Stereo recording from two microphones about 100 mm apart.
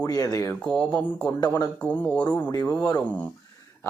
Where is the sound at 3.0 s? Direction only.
15° left (ahead or behind).